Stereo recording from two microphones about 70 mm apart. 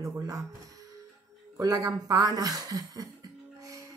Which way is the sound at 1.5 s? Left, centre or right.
Right.